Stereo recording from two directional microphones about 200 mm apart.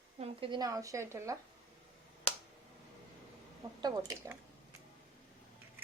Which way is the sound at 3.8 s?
20° right (ahead or behind).